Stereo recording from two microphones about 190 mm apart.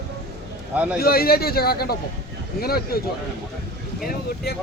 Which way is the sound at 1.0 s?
55° left (ahead or behind).